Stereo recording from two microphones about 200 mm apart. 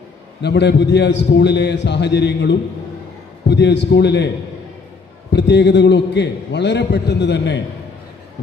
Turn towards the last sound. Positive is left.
turn(degrees=60)  # may be behind; listen again after turning